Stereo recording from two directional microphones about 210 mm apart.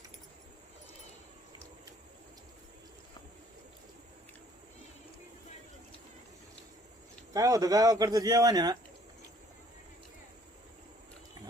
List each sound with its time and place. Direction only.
7.3 s a man's voice: 15° right (ahead or behind)